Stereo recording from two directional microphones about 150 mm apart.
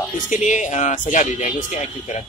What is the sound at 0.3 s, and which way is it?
Speech, 55° left (ahead or behind).